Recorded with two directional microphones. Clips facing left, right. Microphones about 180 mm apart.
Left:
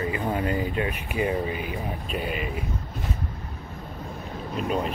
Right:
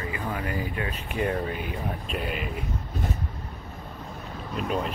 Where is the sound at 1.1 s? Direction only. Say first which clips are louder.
Even; 5° left (ahead or behind).